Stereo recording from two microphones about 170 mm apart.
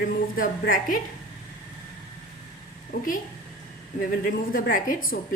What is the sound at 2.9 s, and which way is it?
Speech, 55° left (ahead or behind).